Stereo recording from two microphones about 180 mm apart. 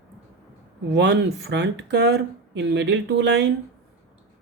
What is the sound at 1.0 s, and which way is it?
Speech, 70° right (ahead or behind).